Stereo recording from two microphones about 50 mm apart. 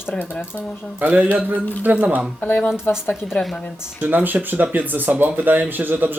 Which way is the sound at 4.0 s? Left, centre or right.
Right.